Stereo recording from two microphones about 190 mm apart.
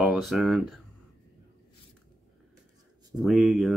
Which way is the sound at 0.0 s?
Centre (ahead or behind).